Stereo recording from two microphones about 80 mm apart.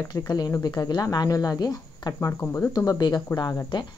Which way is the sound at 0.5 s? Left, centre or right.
Left.